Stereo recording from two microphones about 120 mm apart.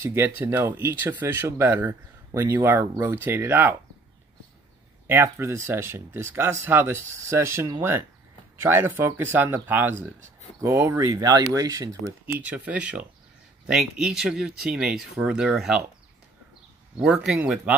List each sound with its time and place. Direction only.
0.0 s speech: 20° right (ahead or behind)
5.0 s speech: 20° right (ahead or behind)
11.1 s speech: 30° right (ahead or behind)
12.3 s speech: 15° right (ahead or behind)
17.0 s speech: 5° right (ahead or behind)